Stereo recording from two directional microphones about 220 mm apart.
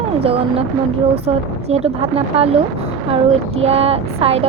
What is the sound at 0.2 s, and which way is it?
Speech, 25° right (ahead or behind).